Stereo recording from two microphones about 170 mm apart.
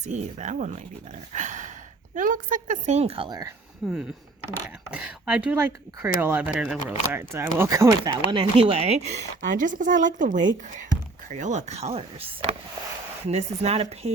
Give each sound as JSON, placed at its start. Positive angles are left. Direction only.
{"t": 0.0, "sound": "speech", "side_deg": -45}
{"t": 1.3, "sound": "a sound", "side_deg": -45}
{"t": 2.1, "sound": "speech", "side_deg": -50}
{"t": 3.8, "sound": "speech", "side_deg": 0}